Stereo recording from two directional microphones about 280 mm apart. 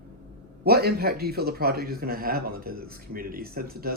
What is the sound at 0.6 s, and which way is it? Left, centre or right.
A man's voice, right.